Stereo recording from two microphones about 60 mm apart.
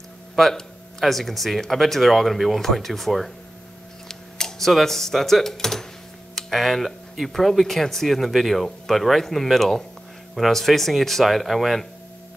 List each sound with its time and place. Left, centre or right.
0.4 s speech: centre